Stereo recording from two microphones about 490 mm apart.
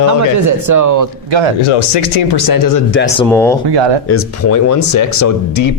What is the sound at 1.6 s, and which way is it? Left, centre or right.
Speech, left.